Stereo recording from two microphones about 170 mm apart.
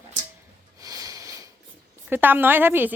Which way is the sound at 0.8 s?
20° right (ahead or behind).